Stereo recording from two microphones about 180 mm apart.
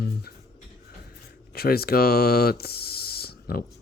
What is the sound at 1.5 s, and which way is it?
Speech, 60° left (ahead or behind).